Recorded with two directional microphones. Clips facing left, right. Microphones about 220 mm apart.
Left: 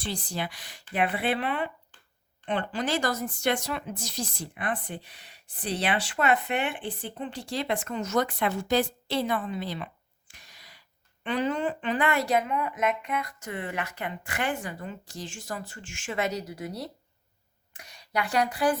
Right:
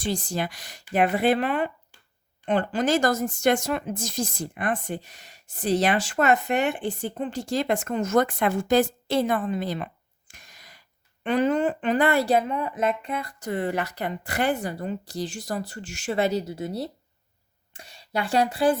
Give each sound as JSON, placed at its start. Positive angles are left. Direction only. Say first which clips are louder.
{"t": 0.0, "sound": "speech", "louder": "right 5 dB", "side_deg": -45}